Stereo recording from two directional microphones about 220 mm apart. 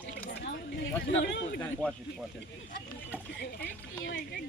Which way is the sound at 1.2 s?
55° left (ahead or behind).